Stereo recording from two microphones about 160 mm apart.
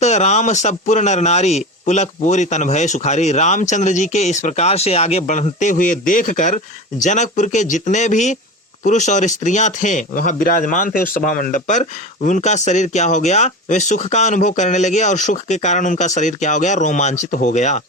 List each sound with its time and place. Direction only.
0.0 s speech: 45° left (ahead or behind)